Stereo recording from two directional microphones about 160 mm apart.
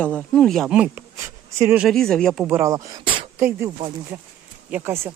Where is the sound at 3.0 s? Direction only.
35° right (ahead or behind).